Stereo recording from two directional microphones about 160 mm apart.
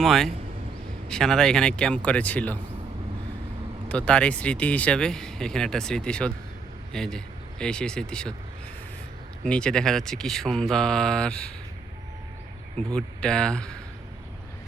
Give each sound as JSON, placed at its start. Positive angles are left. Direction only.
{"t": 0.0, "sound": "speech", "side_deg": 0}
{"t": 3.8, "sound": "speech", "side_deg": 5}
{"t": 9.4, "sound": "speech", "side_deg": 5}
{"t": 12.9, "sound": "speech", "side_deg": 5}